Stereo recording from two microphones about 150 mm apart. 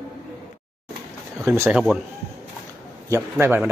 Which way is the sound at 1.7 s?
5° right (ahead or behind).